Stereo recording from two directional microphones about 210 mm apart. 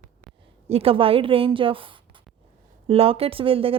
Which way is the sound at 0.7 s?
25° right (ahead or behind).